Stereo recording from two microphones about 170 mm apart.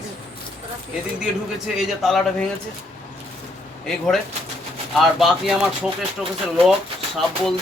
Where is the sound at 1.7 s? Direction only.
Centre (ahead or behind).